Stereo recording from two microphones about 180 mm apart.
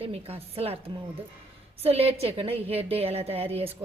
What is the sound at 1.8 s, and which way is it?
A woman's voice, 35° right (ahead or behind).